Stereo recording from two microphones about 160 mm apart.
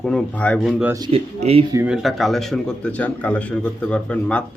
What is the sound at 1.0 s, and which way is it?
Speech, 35° right (ahead or behind).